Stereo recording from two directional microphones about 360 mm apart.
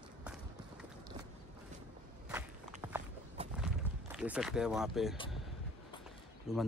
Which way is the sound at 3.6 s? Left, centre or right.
Centre.